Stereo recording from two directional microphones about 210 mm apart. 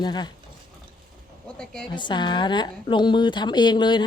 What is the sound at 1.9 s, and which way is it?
Speech, 20° left (ahead or behind).